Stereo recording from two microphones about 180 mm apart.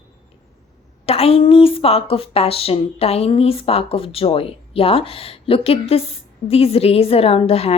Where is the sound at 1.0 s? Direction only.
35° left (ahead or behind).